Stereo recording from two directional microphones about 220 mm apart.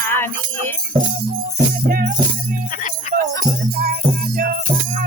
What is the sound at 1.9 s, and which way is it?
Music, 40° right (ahead or behind).